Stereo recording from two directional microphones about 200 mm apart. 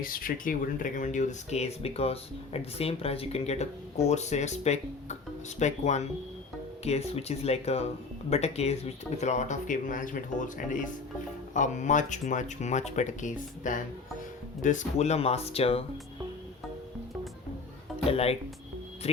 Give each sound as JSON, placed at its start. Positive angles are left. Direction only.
{"t": 0.0, "sound": "speech", "side_deg": 45}
{"t": 11.5, "sound": "speech", "side_deg": 40}
{"t": 18.1, "sound": "speech", "side_deg": 30}